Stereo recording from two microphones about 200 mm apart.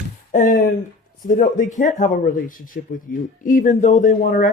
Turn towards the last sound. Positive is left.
turn(degrees=40)  # may be behind; listen again after turning